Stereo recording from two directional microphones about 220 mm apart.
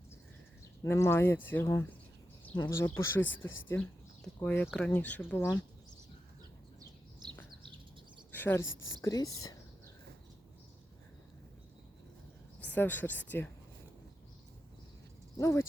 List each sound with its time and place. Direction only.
0.9 s speech: 10° left (ahead or behind)
3.2 s a woman's voice: 60° left (ahead or behind)
3.7 s speech: 5° left (ahead or behind)
8.3 s bird: 10° left (ahead or behind)
8.6 s a woman's voice: 60° left (ahead or behind)
9.0 s speech: 15° left (ahead or behind)
12.5 s a sound: 5° left (ahead or behind)
13.2 s speech: 5° left (ahead or behind)
15.4 s speech: 10° left (ahead or behind)